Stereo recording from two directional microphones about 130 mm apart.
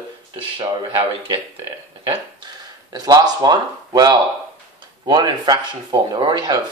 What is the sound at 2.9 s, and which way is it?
Speech, 30° right (ahead or behind).